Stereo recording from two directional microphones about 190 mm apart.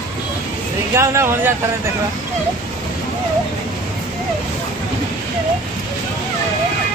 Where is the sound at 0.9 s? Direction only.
15° right (ahead or behind).